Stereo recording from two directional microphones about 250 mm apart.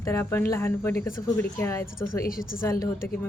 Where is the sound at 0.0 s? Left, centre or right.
Centre.